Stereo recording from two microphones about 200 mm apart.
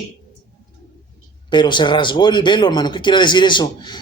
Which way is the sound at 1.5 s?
20° left (ahead or behind).